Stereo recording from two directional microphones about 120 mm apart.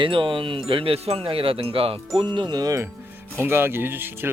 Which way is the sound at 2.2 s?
35° right (ahead or behind).